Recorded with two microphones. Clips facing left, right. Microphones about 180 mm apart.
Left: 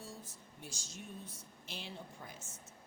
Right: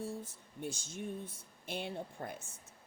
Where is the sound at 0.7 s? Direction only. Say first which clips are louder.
Right 7 dB; 55° right (ahead or behind).